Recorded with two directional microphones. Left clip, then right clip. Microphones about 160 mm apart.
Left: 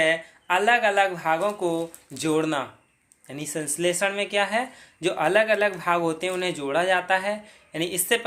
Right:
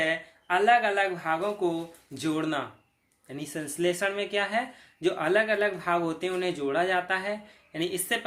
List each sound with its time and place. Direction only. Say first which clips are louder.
0.0 s speech: left 6 dB; 25° left (ahead or behind)